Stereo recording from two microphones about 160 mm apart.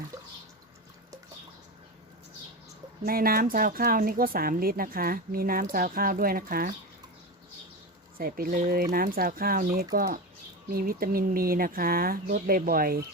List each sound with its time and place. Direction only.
0.1 s drip: 15° right (ahead or behind)
3.0 s speech: 65° right (ahead or behind)
8.2 s speech: 65° right (ahead or behind)